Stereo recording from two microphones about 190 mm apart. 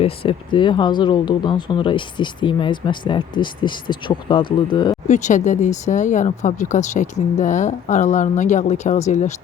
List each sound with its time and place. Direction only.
0.0 s speech: 30° left (ahead or behind)
5.0 s speech: 40° left (ahead or behind)